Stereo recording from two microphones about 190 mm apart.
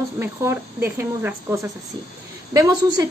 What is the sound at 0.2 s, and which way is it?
A woman's voice, 15° right (ahead or behind).